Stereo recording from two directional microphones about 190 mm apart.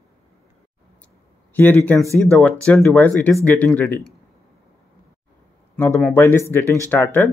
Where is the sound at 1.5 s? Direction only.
10° left (ahead or behind).